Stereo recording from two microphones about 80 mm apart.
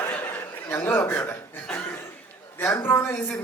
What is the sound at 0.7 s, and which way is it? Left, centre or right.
Speech, left.